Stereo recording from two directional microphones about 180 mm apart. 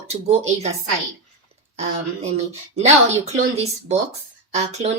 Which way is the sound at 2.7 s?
35° right (ahead or behind).